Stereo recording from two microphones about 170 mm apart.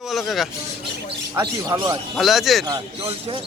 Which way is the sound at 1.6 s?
20° right (ahead or behind).